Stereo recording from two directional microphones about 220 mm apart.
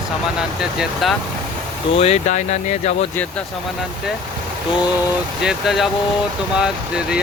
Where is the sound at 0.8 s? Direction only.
Centre (ahead or behind).